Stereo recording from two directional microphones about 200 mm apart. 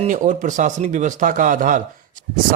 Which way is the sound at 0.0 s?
40° right (ahead or behind).